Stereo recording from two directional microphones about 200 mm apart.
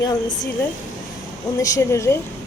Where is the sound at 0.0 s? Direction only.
20° left (ahead or behind).